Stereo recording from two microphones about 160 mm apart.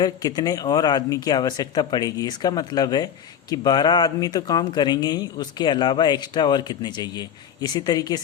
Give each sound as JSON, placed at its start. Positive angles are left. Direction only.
{"t": 0.0, "sound": "speech", "side_deg": 25}